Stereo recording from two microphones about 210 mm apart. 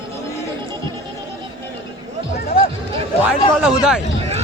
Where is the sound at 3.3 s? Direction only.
5° right (ahead or behind).